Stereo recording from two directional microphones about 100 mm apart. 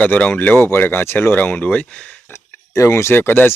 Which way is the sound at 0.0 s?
15° left (ahead or behind).